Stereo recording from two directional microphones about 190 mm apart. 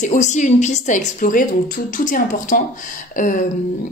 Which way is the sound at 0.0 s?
40° left (ahead or behind).